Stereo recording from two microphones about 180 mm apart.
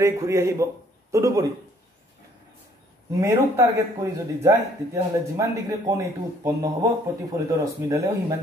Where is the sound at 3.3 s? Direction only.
20° right (ahead or behind).